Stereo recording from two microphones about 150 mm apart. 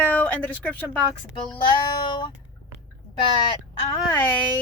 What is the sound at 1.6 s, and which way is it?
Child singing, 30° left (ahead or behind).